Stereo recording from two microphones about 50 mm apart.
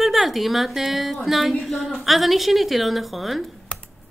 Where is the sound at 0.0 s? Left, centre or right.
Centre.